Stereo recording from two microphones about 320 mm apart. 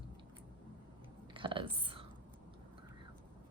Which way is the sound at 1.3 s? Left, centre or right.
Centre.